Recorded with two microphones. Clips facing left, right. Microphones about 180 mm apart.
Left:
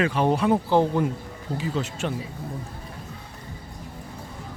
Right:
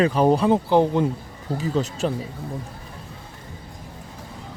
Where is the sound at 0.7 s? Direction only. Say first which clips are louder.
Right 3 dB; 20° right (ahead or behind).